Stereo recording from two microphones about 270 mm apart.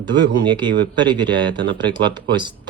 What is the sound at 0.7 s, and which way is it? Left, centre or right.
Speech, right.